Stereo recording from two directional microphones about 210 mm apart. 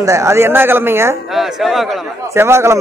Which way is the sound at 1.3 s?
Centre (ahead or behind).